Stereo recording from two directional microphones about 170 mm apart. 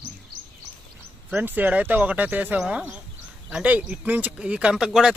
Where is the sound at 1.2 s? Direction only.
10° right (ahead or behind).